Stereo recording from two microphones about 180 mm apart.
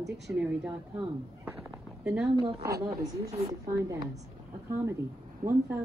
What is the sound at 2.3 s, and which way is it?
A woman's voice, 30° right (ahead or behind).